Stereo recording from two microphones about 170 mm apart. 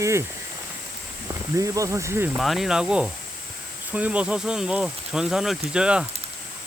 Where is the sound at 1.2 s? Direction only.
20° right (ahead or behind).